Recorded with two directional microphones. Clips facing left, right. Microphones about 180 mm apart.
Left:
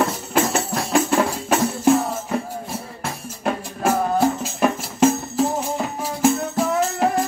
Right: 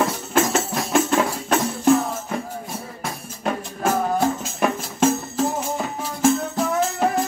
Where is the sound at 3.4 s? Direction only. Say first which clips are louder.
Left 2 dB; 5° left (ahead or behind).